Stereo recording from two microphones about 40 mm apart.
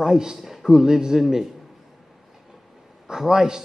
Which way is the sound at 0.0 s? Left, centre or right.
Centre.